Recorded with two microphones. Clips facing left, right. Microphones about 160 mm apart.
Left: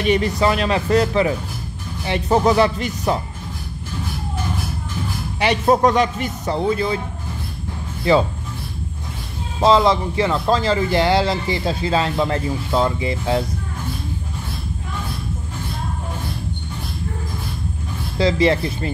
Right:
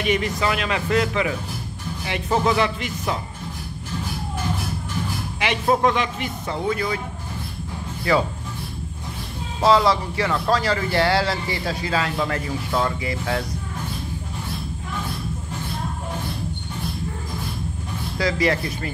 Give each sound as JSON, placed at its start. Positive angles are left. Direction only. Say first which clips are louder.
{"t": 0.0, "sound": "speech", "louder": "left 5 dB", "side_deg": 35}
{"t": 5.4, "sound": "speech", "louder": "left 4 dB", "side_deg": 40}
{"t": 8.1, "sound": "a man's voice", "louder": "left 4 dB", "side_deg": 25}
{"t": 9.6, "sound": "a man's voice", "louder": "left 3 dB", "side_deg": 25}
{"t": 18.1, "sound": "a man's voice", "louder": "left 5 dB", "side_deg": 25}